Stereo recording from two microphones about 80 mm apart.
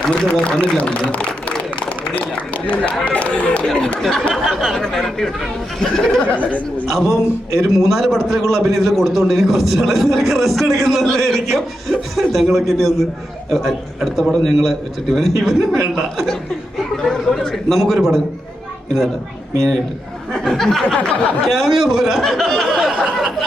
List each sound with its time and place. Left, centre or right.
0.1 s a man's voice: centre
6.2 s speech: centre
6.8 s a man's voice: centre
17.0 s a man's voice: centre
19.5 s a man's voice: centre
20.8 s speech: centre
21.4 s a man's voice: centre
22.9 s a sound: centre